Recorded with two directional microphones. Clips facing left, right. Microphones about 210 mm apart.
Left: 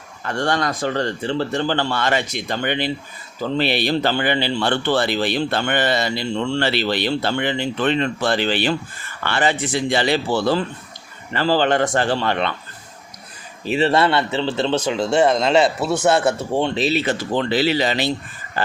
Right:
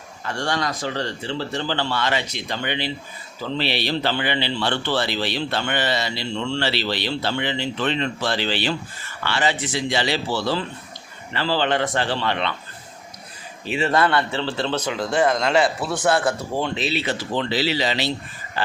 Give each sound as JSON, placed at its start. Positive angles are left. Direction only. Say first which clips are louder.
{"t": 0.3, "sound": "speech", "louder": "left 4 dB", "side_deg": 55}
{"t": 13.7, "sound": "a man's voice", "louder": "left 3 dB", "side_deg": 35}